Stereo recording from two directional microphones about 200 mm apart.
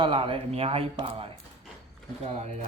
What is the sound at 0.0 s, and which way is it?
A man's voice, 25° right (ahead or behind).